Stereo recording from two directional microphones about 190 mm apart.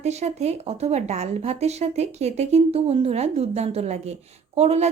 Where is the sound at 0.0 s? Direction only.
35° right (ahead or behind).